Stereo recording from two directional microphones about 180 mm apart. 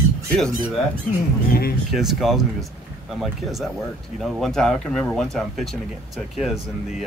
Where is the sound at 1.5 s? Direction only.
55° left (ahead or behind).